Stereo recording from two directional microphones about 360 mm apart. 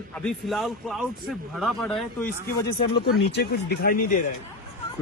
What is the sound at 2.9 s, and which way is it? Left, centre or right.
Speech, left.